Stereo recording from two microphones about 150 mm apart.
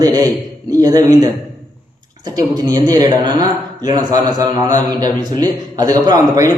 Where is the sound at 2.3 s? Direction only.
25° right (ahead or behind).